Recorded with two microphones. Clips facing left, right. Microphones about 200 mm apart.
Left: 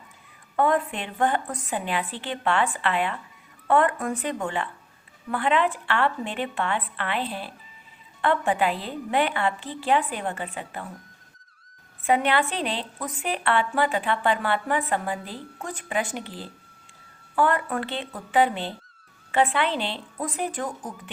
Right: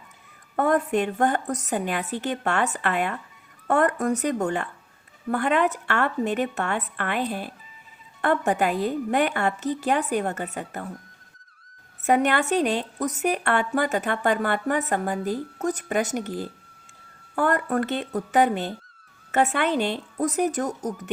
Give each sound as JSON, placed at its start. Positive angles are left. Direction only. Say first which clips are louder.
{"t": 0.5, "sound": "a woman's voice", "louder": "right 2 dB", "side_deg": -45}
{"t": 12.0, "sound": "a woman's voice", "louder": "right 2 dB", "side_deg": -45}